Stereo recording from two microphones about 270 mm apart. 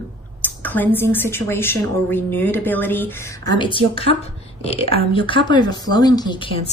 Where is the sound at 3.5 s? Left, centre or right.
Centre.